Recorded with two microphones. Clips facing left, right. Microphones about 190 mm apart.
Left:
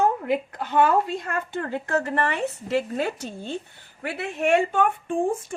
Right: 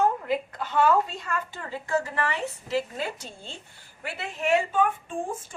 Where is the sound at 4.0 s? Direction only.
60° left (ahead or behind).